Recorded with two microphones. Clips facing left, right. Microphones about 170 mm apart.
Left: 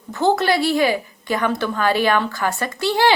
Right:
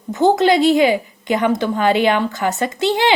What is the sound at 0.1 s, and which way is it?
A woman's voice, 20° right (ahead or behind).